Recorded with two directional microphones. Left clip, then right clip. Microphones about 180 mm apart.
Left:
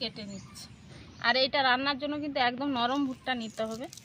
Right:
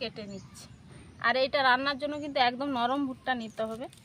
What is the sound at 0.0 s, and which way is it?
A woman's voice, 5° right (ahead or behind).